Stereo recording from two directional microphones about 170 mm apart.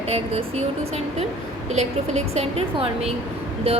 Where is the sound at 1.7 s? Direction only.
40° right (ahead or behind).